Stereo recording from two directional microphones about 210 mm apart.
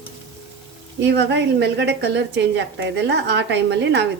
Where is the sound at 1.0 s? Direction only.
55° right (ahead or behind).